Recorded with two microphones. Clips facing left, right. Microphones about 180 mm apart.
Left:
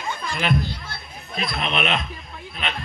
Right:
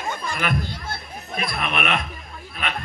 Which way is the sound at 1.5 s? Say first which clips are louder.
Left 1 dB; 25° left (ahead or behind).